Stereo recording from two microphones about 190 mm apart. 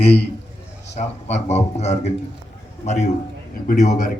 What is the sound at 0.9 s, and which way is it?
A man's voice, 35° left (ahead or behind).